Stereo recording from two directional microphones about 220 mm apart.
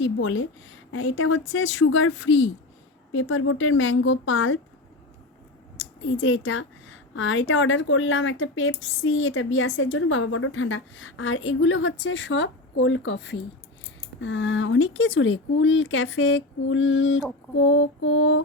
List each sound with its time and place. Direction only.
0.0 s a woman's voice: 60° left (ahead or behind)
5.7 s a woman's voice: 60° left (ahead or behind)